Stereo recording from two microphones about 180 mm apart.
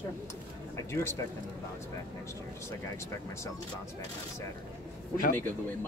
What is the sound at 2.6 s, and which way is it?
Speech, 15° left (ahead or behind).